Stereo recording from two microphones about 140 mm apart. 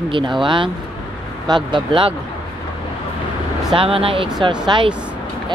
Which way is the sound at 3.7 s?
40° right (ahead or behind).